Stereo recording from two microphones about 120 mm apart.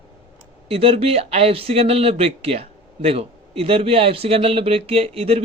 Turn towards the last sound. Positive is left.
turn(degrees=-55)  # may be behind; listen again after turning